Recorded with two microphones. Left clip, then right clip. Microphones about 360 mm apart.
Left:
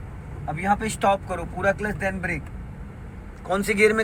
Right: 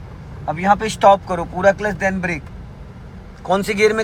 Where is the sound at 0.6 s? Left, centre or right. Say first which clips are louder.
Right 9 dB; centre.